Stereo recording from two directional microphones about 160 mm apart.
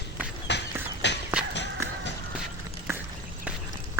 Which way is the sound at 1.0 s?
90° left.